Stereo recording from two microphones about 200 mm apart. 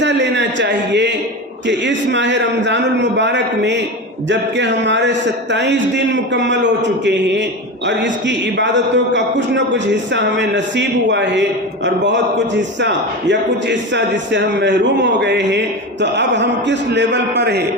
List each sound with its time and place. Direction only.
0.0 s a sound: 60° right (ahead or behind)
1.6 s a man's voice: 65° right (ahead or behind)
12.8 s a man's voice: 60° right (ahead or behind)